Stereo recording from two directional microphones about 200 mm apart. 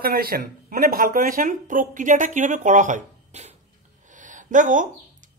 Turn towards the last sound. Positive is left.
turn(degrees=-40)  # may be behind; listen again after turning